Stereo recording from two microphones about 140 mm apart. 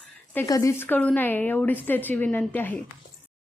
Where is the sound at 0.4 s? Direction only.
25° left (ahead or behind).